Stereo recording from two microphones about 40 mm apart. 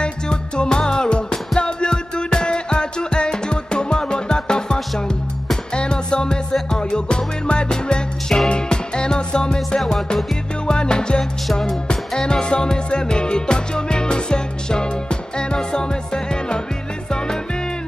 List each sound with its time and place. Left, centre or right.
0.0 s music: left
9.8 s music: centre
10.7 s music: left